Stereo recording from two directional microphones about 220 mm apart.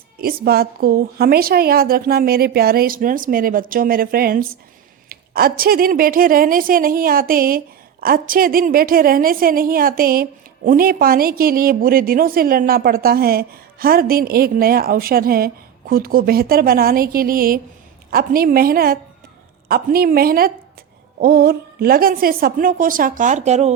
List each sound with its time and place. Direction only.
0.2 s a woman's voice: 45° right (ahead or behind)